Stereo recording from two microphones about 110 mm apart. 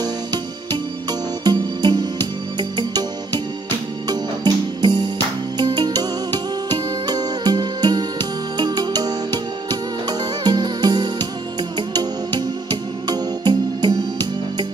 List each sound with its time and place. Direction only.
0.0 s music: 40° right (ahead or behind)
4.1 s music: 40° right (ahead or behind)